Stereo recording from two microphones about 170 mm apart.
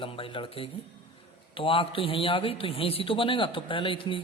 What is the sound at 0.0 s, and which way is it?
A man's voice, 30° left (ahead or behind).